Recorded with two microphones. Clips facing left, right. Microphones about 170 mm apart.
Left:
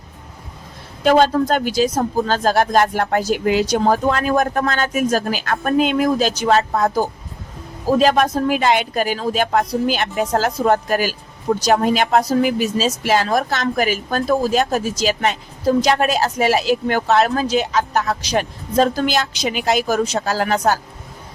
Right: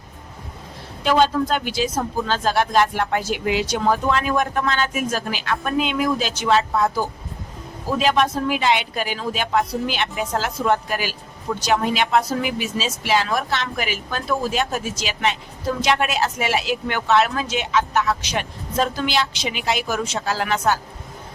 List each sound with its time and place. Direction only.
1.0 s a woman's voice: 45° left (ahead or behind)